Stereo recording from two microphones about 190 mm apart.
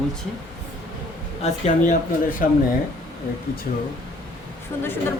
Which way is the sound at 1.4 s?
45° left (ahead or behind).